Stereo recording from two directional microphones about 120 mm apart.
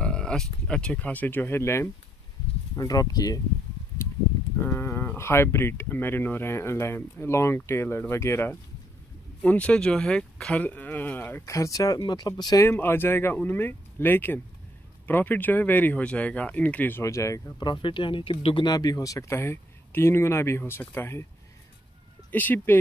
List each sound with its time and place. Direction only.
0.0 s a sound: 5° left (ahead or behind)
0.7 s speech: 10° left (ahead or behind); by 3.3 s 30° left (ahead or behind)
4.6 s speech: 20° left (ahead or behind); by 12.6 s 35° left (ahead or behind)
12.6 s speech: 20° left (ahead or behind)
17.0 s speech: 25° left (ahead or behind)
17.6 s speech: 45° left (ahead or behind)
18.7 s speech: 35° left (ahead or behind)
22.3 s speech: 15° left (ahead or behind)